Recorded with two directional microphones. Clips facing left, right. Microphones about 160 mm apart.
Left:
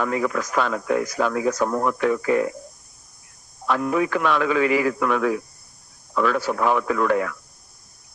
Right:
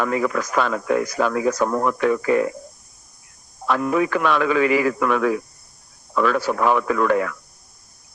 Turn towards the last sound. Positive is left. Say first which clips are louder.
# right 2 dB
turn(degrees=-75)  # may be behind; listen again after turning